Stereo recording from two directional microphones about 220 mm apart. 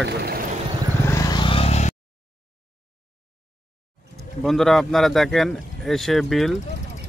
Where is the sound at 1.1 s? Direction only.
15° left (ahead or behind).